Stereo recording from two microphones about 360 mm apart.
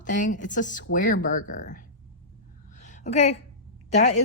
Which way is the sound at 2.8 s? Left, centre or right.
Centre.